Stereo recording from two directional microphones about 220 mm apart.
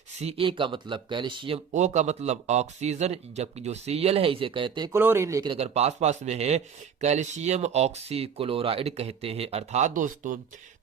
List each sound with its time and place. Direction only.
0.2 s speech: 25° right (ahead or behind)